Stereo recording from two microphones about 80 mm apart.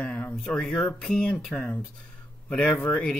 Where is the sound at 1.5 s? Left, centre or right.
Left.